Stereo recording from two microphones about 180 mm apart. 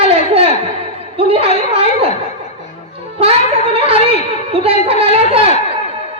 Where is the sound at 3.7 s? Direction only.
30° right (ahead or behind).